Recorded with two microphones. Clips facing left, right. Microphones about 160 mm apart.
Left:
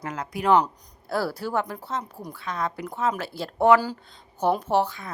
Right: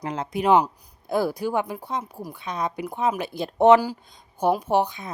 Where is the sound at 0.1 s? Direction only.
25° right (ahead or behind).